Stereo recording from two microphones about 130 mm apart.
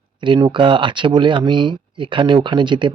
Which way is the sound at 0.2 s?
35° right (ahead or behind).